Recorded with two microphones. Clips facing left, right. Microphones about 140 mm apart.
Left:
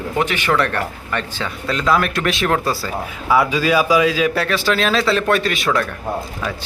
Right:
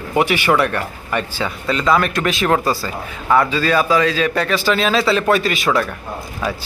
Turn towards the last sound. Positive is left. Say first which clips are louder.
# right 1 dB
turn(degrees=0)  # may be behind; listen again after turning